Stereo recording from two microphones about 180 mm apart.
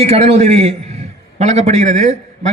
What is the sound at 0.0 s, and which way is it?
A man's voice, 35° right (ahead or behind).